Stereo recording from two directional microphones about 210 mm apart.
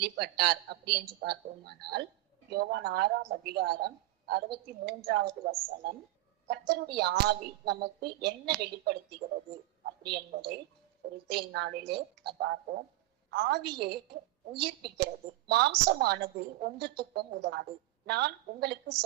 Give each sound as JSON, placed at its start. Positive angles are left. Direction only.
{"t": 0.0, "sound": "a woman's voice", "side_deg": -50}
{"t": 13.3, "sound": "a woman's voice", "side_deg": -50}